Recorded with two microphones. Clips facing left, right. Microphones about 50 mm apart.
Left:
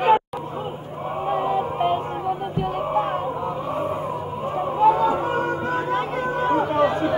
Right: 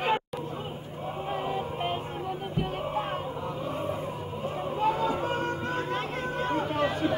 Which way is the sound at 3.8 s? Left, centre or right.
Centre.